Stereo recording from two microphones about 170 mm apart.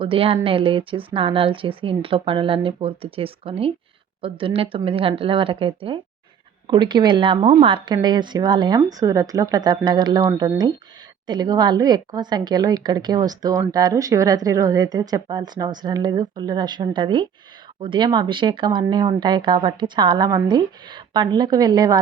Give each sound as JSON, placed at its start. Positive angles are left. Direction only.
{"t": 0.0, "sound": "a woman's voice", "side_deg": -30}